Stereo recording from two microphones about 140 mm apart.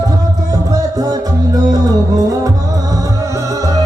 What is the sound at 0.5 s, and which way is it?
Music, 25° right (ahead or behind).